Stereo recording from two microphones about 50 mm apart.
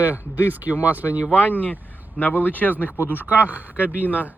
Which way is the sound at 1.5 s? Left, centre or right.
Left.